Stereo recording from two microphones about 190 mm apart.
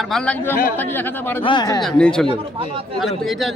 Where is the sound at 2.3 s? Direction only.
30° right (ahead or behind).